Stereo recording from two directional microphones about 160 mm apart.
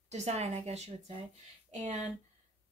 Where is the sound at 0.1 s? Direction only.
45° right (ahead or behind).